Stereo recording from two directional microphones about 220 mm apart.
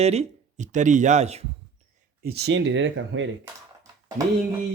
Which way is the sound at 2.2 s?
45° right (ahead or behind).